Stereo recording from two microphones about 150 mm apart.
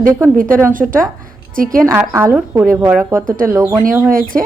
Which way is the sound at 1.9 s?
15° right (ahead or behind).